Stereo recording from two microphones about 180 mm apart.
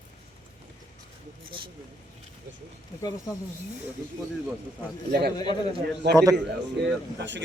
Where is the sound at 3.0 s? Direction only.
20° left (ahead or behind).